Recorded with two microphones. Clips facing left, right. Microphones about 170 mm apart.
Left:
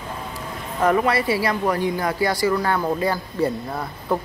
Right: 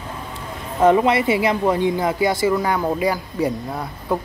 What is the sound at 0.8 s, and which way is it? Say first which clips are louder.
Speech: right 4 dB; 20° right (ahead or behind).